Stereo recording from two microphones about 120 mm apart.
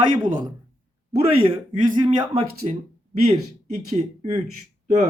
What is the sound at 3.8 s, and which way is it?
Speech, 65° right (ahead or behind).